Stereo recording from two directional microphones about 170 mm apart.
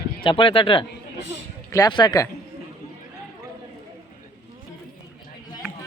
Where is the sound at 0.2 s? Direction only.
30° left (ahead or behind).